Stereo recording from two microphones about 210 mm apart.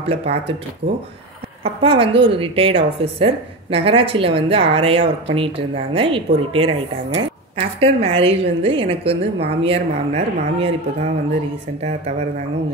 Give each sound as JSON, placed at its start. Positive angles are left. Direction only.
{"t": 0.0, "sound": "speech", "side_deg": -30}
{"t": 1.6, "sound": "speech", "side_deg": -25}
{"t": 7.8, "sound": "speech", "side_deg": -25}